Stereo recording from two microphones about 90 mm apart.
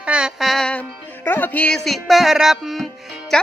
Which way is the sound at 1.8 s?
Centre (ahead or behind).